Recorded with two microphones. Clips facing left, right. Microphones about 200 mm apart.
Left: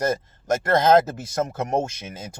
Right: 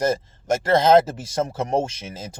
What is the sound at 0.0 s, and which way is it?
Speech, 30° right (ahead or behind).